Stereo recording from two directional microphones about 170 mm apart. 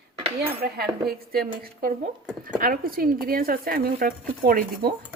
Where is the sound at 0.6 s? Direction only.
65° right (ahead or behind).